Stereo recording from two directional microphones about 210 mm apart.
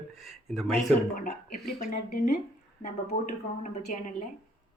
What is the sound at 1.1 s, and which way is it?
A woman's voice, 40° left (ahead or behind).